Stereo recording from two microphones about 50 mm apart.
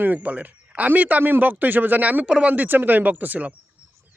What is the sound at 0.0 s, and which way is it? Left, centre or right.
Speech, right.